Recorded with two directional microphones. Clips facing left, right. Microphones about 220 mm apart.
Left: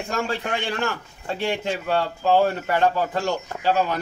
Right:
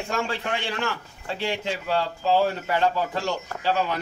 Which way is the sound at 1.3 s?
50° left (ahead or behind).